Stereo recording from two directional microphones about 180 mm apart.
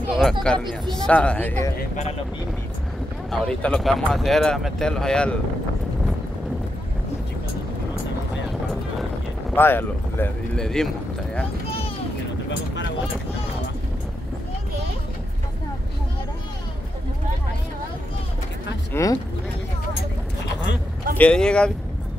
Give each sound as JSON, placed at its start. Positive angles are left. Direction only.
{"t": 0.0, "sound": "speech", "side_deg": 0}
{"t": 3.3, "sound": "speech", "side_deg": 5}
{"t": 9.6, "sound": "speech", "side_deg": 10}
{"t": 12.4, "sound": "vehicle", "side_deg": 90}
{"t": 18.9, "sound": "speech", "side_deg": 15}
{"t": 21.2, "sound": "speech", "side_deg": 5}